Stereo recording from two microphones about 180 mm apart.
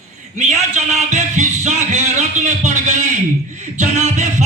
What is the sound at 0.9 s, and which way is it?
Speech, 40° right (ahead or behind).